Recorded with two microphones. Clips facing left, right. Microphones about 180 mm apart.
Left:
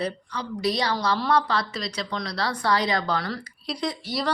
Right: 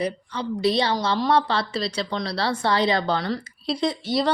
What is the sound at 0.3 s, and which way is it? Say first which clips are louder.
Speech: right 5 dB; 25° right (ahead or behind).